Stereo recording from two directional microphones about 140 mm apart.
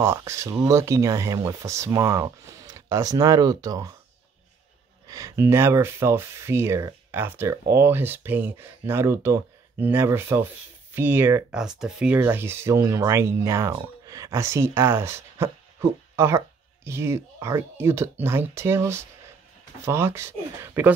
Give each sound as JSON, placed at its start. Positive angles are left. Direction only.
{"t": 0.0, "sound": "speech", "side_deg": -20}
{"t": 5.0, "sound": "speech", "side_deg": -25}
{"t": 11.5, "sound": "speech", "side_deg": -5}
{"t": 12.2, "sound": "speech", "side_deg": -15}